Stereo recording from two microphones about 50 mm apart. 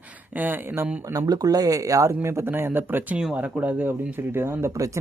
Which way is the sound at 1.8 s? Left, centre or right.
Right.